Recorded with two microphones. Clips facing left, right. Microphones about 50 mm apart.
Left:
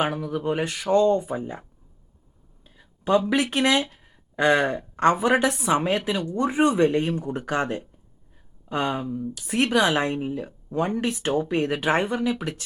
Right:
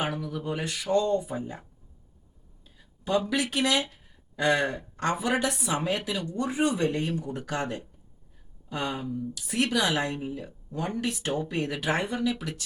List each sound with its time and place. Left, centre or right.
0.0 s speech: left
2.6 s a sound: left
3.2 s speech: left